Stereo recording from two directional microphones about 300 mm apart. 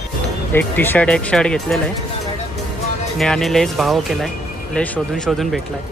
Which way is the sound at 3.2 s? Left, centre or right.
Centre.